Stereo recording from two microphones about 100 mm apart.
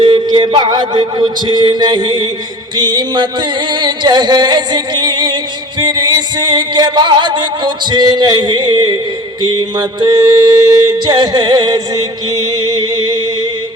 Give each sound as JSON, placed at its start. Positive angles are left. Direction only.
{"t": 0.0, "sound": "yodeling", "side_deg": -50}
{"t": 12.7, "sound": "music", "side_deg": -50}